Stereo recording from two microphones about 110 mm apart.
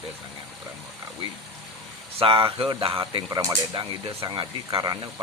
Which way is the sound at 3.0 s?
40° right (ahead or behind).